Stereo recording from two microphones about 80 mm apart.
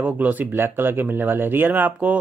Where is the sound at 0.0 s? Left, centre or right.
Right.